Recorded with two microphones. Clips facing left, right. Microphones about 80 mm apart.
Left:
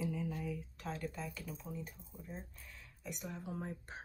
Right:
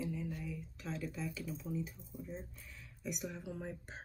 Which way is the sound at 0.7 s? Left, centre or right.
Left.